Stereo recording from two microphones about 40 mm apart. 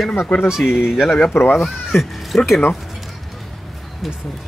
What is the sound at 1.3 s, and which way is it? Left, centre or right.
Speech, left.